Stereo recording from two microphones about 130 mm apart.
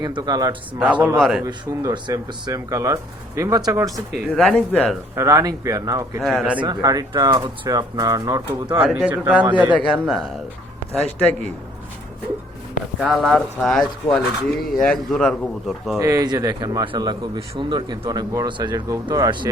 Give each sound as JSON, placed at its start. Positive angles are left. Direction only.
{"t": 0.0, "sound": "speech", "side_deg": -30}
{"t": 1.2, "sound": "speech", "side_deg": -5}
{"t": 1.5, "sound": "speech", "side_deg": -35}
{"t": 3.9, "sound": "speech", "side_deg": 5}
{"t": 5.1, "sound": "speech", "side_deg": -25}
{"t": 6.2, "sound": "speech", "side_deg": 0}
{"t": 6.6, "sound": "speech", "side_deg": -30}
{"t": 8.8, "sound": "a man's voice", "side_deg": -5}
{"t": 13.0, "sound": "speech", "side_deg": 0}
{"t": 16.0, "sound": "speech", "side_deg": -30}